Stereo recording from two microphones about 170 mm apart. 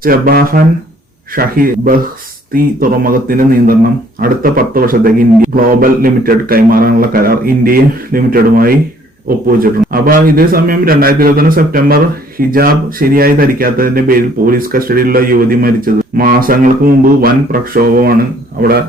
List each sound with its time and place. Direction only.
0.0 s speech: 60° right (ahead or behind)
9.9 s speech: 55° right (ahead or behind)